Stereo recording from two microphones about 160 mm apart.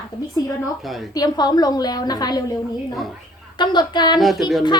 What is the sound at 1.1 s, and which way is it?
A woman's voice, 25° left (ahead or behind).